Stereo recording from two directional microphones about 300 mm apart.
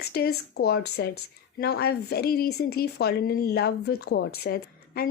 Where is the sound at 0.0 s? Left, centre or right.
Left.